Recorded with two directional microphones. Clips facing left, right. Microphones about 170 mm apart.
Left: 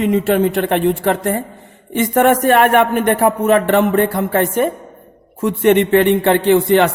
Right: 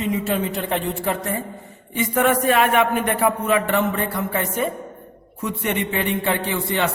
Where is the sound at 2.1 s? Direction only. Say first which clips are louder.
Left 6 dB; 45° left (ahead or behind).